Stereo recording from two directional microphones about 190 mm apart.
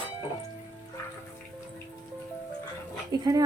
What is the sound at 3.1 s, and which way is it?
Dog, 20° right (ahead or behind).